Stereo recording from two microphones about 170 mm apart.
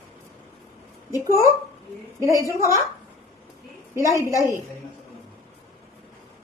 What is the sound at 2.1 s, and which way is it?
Speech, 15° right (ahead or behind).